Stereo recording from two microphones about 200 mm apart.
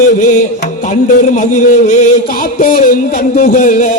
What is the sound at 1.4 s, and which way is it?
Music, 35° left (ahead or behind).